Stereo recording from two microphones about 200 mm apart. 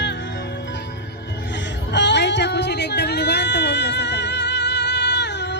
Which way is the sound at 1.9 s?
60° left (ahead or behind).